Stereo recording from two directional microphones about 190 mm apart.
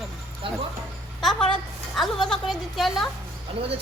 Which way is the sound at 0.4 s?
25° right (ahead or behind).